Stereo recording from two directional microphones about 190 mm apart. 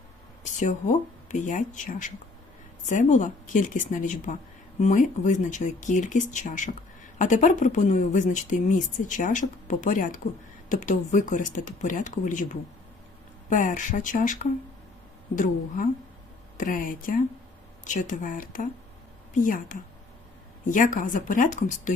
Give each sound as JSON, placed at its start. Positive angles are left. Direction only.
{"t": 0.6, "sound": "speech", "side_deg": 40}
{"t": 16.6, "sound": "a woman's voice", "side_deg": 45}